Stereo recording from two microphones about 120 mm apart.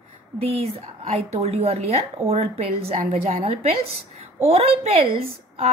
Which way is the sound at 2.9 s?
75° right (ahead or behind).